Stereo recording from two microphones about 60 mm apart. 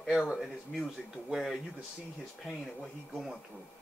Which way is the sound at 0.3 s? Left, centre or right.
Centre.